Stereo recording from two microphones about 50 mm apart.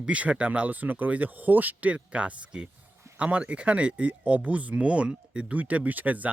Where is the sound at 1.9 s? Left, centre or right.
Right.